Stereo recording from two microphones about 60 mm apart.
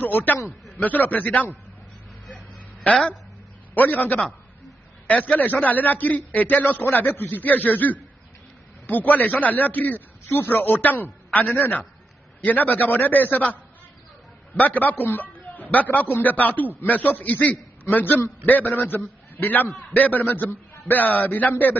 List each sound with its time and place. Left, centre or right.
0.0 s a man's voice: left
2.3 s a sound: left
3.7 s a man's voice: left
14.6 s a man's voice: left